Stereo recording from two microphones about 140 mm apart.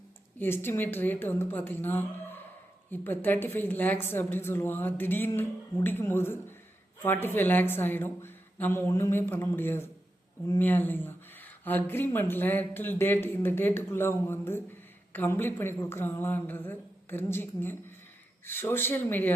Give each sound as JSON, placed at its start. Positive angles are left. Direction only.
{"t": 0.3, "sound": "speech", "side_deg": 15}